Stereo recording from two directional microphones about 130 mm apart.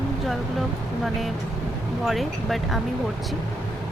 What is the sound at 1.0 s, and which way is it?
Speech, centre (ahead or behind).